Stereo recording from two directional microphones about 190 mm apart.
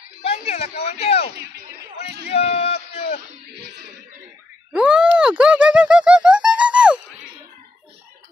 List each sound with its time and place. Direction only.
0.2 s speech: 35° left (ahead or behind)
1.3 s speech: 60° right (ahead or behind)
2.2 s speech: 30° left (ahead or behind)
4.7 s a sound: 5° right (ahead or behind)